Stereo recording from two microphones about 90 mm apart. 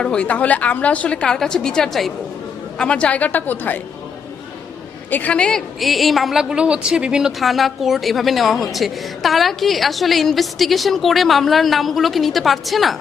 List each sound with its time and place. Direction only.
0.0 s a woman's voice: 10° left (ahead or behind)
5.1 s a woman's voice: 15° left (ahead or behind)